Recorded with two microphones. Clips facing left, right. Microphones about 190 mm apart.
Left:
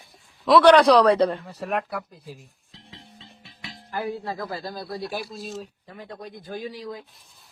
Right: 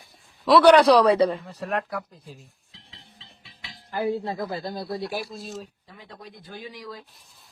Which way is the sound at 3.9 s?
25° right (ahead or behind).